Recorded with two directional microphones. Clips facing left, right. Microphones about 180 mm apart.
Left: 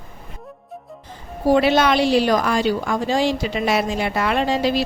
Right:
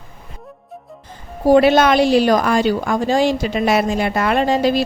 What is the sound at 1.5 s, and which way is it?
A woman's voice, 50° right (ahead or behind).